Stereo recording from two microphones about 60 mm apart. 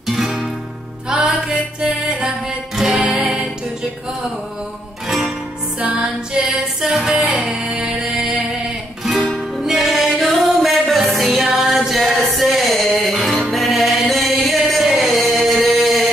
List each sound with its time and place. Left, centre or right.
0.0 s music: centre
5.0 s music: centre
5.8 s music: right
6.5 s music: centre
9.0 s music: centre